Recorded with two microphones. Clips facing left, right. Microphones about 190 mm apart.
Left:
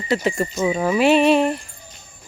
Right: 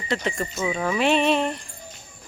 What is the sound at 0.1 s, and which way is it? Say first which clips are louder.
Speech: left 6 dB; 5° left (ahead or behind).